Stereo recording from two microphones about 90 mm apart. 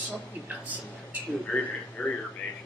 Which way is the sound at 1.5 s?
10° left (ahead or behind).